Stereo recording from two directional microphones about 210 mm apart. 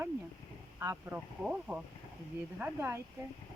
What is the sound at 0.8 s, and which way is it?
A woman's voice, 10° right (ahead or behind).